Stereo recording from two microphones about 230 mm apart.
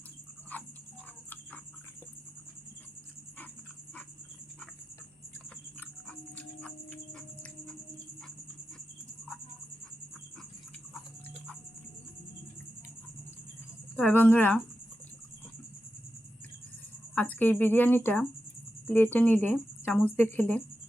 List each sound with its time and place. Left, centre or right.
0.5 s a sound: centre
6.1 s music: centre
13.9 s speech: centre
17.2 s speech: centre